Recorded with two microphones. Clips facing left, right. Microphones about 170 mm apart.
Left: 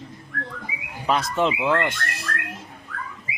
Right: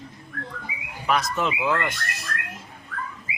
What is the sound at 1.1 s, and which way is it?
Speech, 30° left (ahead or behind).